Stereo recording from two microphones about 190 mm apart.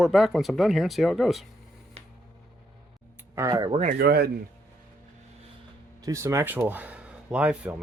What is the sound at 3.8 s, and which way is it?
Speech, 50° right (ahead or behind).